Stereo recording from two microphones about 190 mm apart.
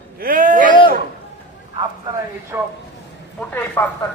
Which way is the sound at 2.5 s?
10° right (ahead or behind).